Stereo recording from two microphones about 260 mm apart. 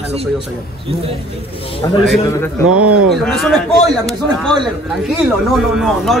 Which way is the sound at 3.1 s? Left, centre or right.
Centre.